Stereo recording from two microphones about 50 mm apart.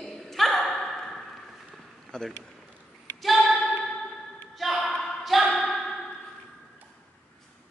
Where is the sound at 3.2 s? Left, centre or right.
Centre.